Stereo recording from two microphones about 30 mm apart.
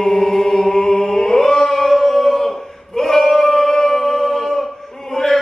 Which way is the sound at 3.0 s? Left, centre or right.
Centre.